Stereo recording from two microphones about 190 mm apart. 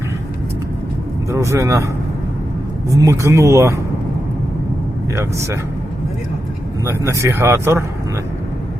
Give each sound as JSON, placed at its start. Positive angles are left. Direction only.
{"t": 1.3, "sound": "speech", "side_deg": -15}
{"t": 3.0, "sound": "speech", "side_deg": -15}
{"t": 6.8, "sound": "speech", "side_deg": -15}